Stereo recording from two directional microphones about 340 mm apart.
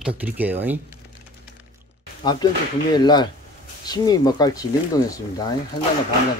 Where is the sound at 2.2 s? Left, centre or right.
Centre.